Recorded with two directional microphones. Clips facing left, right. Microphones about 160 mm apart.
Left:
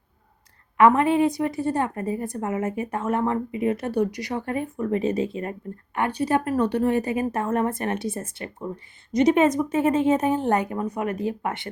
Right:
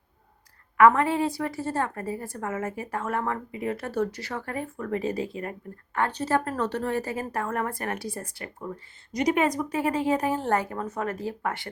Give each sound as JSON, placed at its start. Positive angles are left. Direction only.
{"t": 0.8, "sound": "a woman's voice", "side_deg": 20}